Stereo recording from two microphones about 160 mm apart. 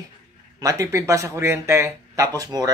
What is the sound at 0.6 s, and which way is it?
A man's voice, 20° right (ahead or behind).